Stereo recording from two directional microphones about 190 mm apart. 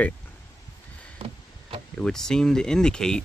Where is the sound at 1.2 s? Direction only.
30° right (ahead or behind).